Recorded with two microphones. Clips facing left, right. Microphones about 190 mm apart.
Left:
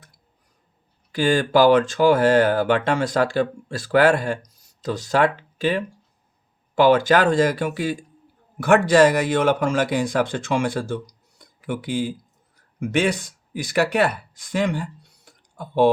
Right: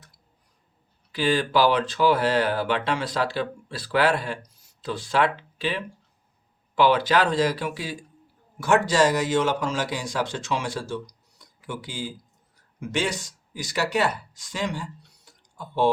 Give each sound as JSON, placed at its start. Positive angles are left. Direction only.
{"t": 1.1, "sound": "a man's voice", "side_deg": 45}